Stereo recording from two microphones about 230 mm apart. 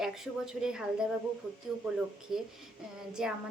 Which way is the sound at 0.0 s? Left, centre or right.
Centre.